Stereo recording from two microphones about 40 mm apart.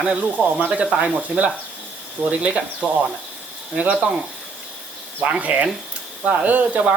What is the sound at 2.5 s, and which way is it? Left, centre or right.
Speech, right.